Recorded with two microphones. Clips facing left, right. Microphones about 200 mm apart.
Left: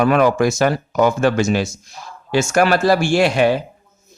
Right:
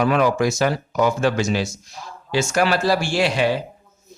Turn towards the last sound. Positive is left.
turn(degrees=50)  # may be behind; listen again after turning